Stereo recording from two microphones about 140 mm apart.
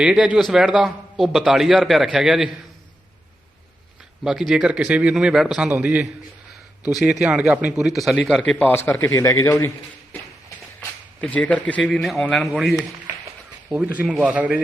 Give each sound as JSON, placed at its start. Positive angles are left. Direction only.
{"t": 0.0, "sound": "a man's voice", "side_deg": -10}
{"t": 4.2, "sound": "a man's voice", "side_deg": -5}
{"t": 10.8, "sound": "a man's voice", "side_deg": 10}